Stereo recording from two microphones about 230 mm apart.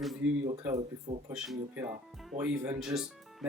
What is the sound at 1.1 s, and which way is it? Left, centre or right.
Speech, right.